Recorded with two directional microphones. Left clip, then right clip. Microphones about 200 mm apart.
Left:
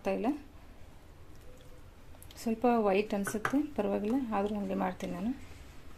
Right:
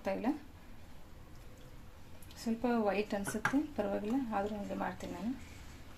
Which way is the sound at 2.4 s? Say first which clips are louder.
Left 5 dB; 35° left (ahead or behind).